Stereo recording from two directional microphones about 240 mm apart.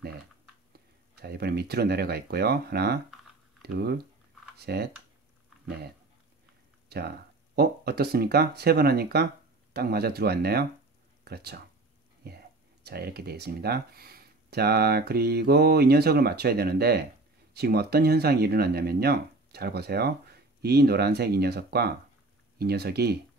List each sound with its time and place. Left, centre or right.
0.7 s speech: right
6.9 s speech: right